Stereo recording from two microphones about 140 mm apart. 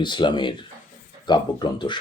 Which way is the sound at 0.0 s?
35° left (ahead or behind).